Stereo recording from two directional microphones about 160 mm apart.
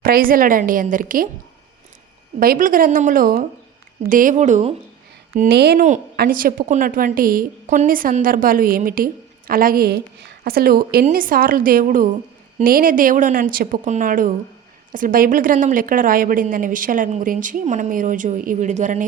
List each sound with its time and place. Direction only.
0.0 s a woman's voice: 65° right (ahead or behind)
2.4 s a woman's voice: 60° right (ahead or behind)
5.3 s speech: 80° right
6.1 s a woman's voice: 60° right (ahead or behind)